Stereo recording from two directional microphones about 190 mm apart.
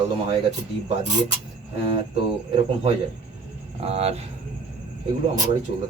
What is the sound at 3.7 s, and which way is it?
Speech, 30° right (ahead or behind).